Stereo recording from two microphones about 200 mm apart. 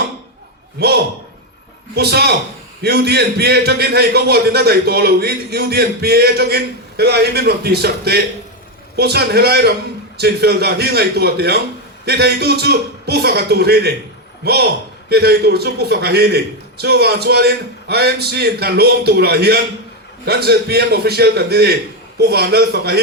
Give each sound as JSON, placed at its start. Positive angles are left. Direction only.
{"t": 2.0, "sound": "a man's voice", "side_deg": -55}